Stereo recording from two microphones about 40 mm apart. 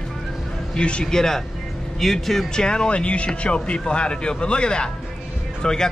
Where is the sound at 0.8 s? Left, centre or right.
Left.